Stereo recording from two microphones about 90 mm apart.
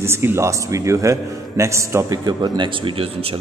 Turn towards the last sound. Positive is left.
turn(degrees=-90)